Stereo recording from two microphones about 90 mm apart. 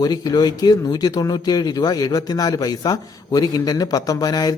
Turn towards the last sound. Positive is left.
turn(degrees=45)  # may be behind; listen again after turning